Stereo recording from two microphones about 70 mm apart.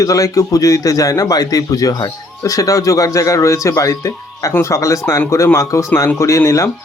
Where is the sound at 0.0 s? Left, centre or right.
Left.